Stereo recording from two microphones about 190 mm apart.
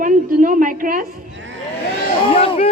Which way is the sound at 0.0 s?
45° right (ahead or behind).